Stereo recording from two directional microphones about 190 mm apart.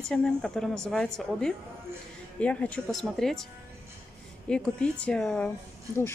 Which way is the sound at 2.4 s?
5° left (ahead or behind).